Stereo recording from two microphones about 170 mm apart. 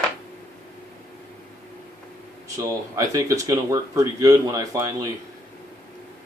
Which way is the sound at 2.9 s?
20° right (ahead or behind).